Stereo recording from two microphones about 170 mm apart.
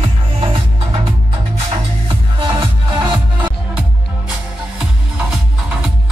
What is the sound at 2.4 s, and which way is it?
Music, 30° right (ahead or behind).